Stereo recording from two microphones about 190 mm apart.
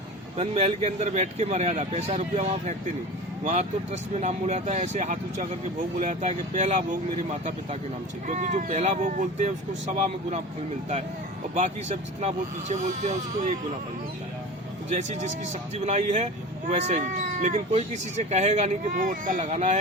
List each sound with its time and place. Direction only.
0.3 s speech: 35° right (ahead or behind)
11.5 s speech: 40° right (ahead or behind)
14.8 s speech: 35° right (ahead or behind)